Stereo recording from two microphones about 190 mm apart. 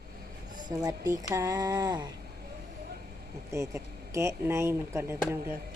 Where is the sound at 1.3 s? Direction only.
20° right (ahead or behind).